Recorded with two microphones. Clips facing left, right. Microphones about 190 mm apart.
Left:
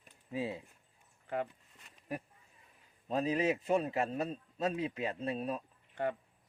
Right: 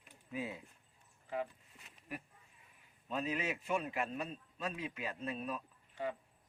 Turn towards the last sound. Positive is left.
turn(degrees=60)  # may be behind; listen again after turning